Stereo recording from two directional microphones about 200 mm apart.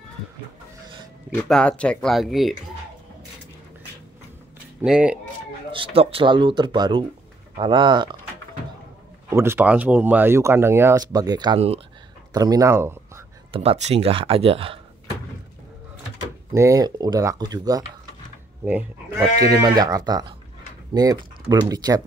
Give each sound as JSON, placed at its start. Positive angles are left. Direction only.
{"t": 1.3, "sound": "speech", "side_deg": 5}
{"t": 4.8, "sound": "speech", "side_deg": -5}
{"t": 5.7, "sound": "speech", "side_deg": -25}
{"t": 9.3, "sound": "speech", "side_deg": -10}
{"t": 12.4, "sound": "speech", "side_deg": -20}
{"t": 13.5, "sound": "speech", "side_deg": -30}
{"t": 16.5, "sound": "speech", "side_deg": -15}